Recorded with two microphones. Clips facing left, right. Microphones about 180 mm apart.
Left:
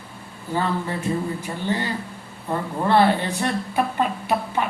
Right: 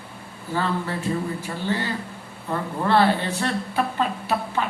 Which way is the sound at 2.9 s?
15° left (ahead or behind).